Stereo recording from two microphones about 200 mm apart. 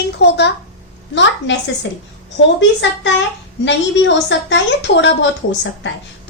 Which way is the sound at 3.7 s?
65° left (ahead or behind).